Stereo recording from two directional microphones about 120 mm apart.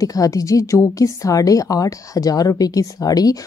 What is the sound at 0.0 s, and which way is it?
A woman's voice, 30° left (ahead or behind).